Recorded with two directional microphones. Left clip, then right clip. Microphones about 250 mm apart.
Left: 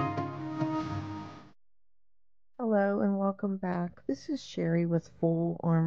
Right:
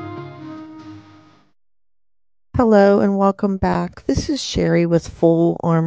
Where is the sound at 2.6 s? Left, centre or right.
Right.